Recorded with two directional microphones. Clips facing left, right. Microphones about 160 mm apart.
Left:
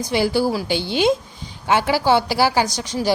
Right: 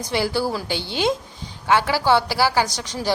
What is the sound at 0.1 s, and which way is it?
A woman's voice, 15° left (ahead or behind).